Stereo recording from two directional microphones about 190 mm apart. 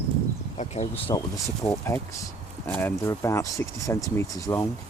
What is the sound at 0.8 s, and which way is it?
Speech, 25° left (ahead or behind).